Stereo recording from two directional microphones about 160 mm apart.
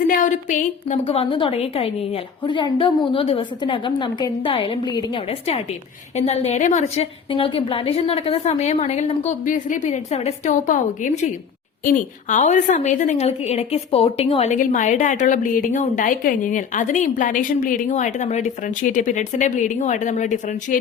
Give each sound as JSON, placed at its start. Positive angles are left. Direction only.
{"t": 0.1, "sound": "a woman's voice", "side_deg": 55}
{"t": 1.0, "sound": "a woman's voice", "side_deg": 35}
{"t": 14.5, "sound": "a woman's voice", "side_deg": 55}
{"t": 17.8, "sound": "a woman's voice", "side_deg": 45}